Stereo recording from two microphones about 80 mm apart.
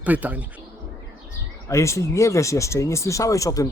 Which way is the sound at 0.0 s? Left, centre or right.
Centre.